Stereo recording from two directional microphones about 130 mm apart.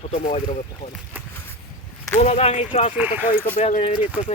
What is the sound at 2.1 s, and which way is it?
Speech, 55° left (ahead or behind).